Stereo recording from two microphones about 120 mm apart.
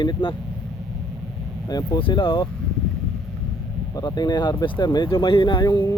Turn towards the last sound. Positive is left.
turn(degrees=35)  # may be behind; listen again after turning